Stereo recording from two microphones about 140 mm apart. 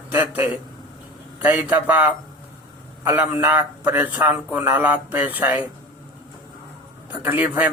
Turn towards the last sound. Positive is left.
turn(degrees=-10)  # may be behind; listen again after turning